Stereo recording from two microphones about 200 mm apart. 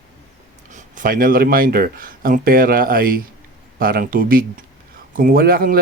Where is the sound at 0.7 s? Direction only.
40° right (ahead or behind).